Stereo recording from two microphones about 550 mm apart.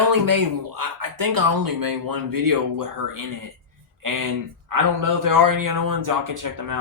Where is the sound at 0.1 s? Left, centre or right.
Right.